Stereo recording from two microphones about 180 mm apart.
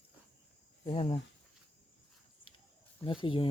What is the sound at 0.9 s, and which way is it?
Speech, 30° left (ahead or behind).